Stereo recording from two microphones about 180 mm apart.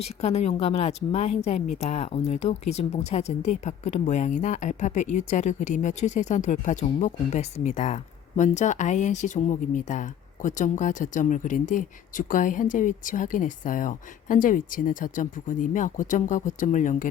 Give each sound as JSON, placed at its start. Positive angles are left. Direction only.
{"t": 0.0, "sound": "speech", "side_deg": 35}